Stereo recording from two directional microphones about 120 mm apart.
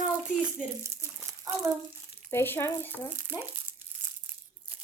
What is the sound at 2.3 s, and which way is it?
Speech, 20° left (ahead or behind).